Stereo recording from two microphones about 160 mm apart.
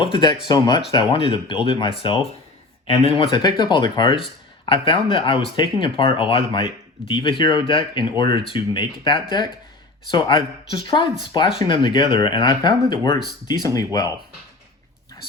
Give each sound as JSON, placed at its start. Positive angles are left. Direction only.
{"t": 0.0, "sound": "speech", "side_deg": 30}